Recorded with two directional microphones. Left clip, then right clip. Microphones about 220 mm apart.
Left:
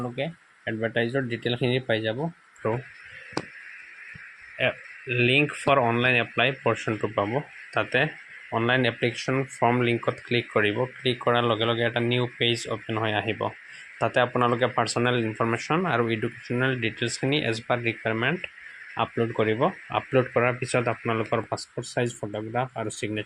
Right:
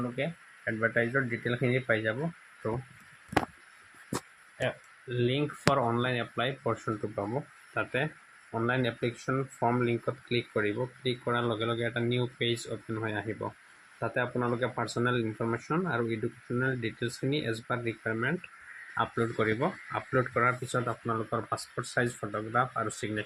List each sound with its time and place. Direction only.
0.2 s speech: 20° left (ahead or behind)
4.5 s speech: 5° left (ahead or behind)